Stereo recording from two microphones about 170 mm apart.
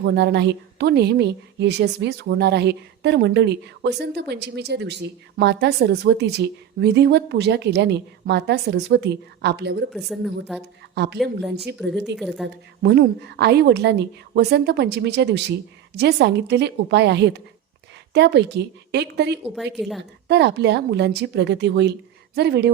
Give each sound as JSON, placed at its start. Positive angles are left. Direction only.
{"t": 0.0, "sound": "a woman's voice", "side_deg": -85}
{"t": 10.5, "sound": "a woman's voice", "side_deg": 0}
{"t": 10.9, "sound": "a woman's voice", "side_deg": -80}